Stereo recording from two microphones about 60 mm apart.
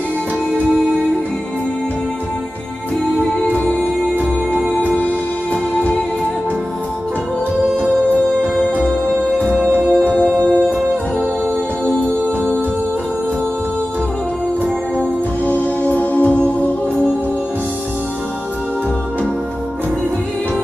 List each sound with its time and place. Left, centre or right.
3.4 s music: left
4.2 s music: right
4.9 s music: left
9.8 s music: right
15.0 s music: left